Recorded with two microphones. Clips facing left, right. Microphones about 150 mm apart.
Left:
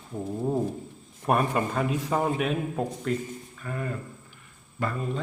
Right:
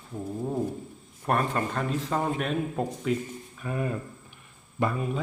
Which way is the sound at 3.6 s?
20° right (ahead or behind).